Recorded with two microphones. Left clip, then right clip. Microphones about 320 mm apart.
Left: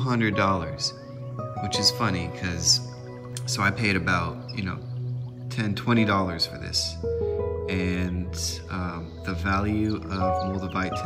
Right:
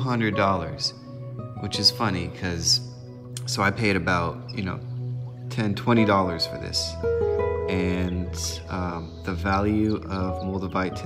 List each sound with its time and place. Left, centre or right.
0.0 s speech: centre
7.0 s music: right
7.6 s speech: centre